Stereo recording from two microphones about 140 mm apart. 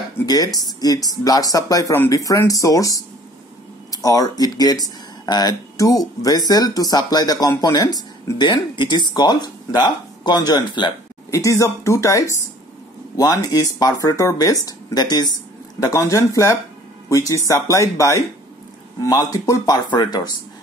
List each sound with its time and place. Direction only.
0.7 s speech: 25° left (ahead or behind)